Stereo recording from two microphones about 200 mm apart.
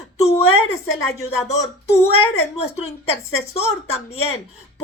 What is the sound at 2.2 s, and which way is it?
A woman's voice, 30° left (ahead or behind).